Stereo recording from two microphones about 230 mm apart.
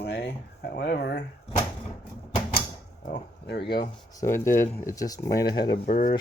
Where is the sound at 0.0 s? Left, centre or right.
Left.